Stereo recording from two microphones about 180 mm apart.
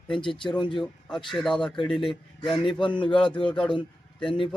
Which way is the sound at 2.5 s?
25° left (ahead or behind).